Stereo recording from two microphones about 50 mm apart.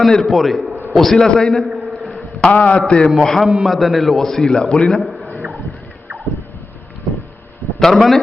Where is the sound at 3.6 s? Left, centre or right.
Centre.